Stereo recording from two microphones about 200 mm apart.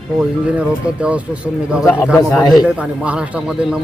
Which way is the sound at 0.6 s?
5° right (ahead or behind).